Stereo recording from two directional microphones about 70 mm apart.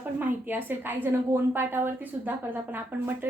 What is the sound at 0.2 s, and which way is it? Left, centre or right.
A woman's voice, right.